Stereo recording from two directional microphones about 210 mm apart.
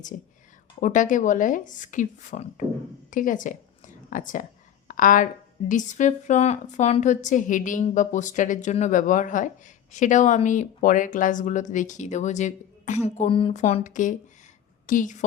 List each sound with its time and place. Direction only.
0.1 s a woman's voice: 40° left (ahead or behind)